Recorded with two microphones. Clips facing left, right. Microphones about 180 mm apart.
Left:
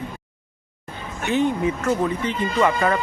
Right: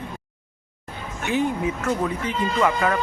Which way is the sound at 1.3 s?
10° right (ahead or behind).